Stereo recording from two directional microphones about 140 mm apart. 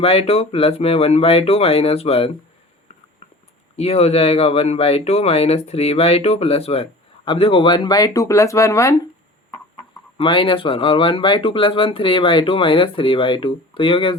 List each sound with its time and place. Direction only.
0.0 s speech: 45° left (ahead or behind)
3.8 s speech: 45° left (ahead or behind); by 9.0 s 20° left (ahead or behind)
10.2 s speech: 35° left (ahead or behind)